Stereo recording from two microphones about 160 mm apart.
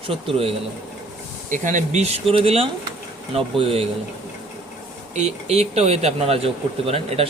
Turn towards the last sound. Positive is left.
turn(degrees=-40)  # may be behind; listen again after turning